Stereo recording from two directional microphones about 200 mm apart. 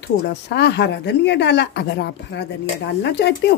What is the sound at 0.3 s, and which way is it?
Speech, 55° left (ahead or behind).